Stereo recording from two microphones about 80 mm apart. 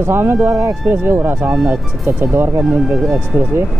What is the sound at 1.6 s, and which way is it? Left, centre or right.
Speech, right.